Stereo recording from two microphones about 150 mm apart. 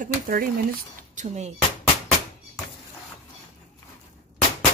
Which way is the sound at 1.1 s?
50° right (ahead or behind).